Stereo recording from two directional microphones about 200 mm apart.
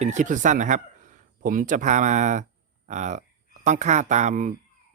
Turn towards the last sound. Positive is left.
turn(degrees=-35)  # may be behind; listen again after turning